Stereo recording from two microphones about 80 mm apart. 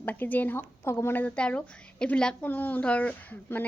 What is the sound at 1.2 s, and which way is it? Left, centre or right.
A woman's voice, centre.